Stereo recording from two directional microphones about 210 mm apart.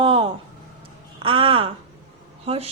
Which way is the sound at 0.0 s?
25° right (ahead or behind).